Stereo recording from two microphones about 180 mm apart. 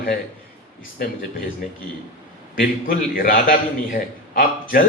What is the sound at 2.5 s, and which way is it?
A man's voice, 50° left (ahead or behind).